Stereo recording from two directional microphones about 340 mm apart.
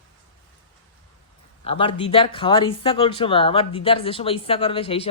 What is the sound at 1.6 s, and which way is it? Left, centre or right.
Speech, centre.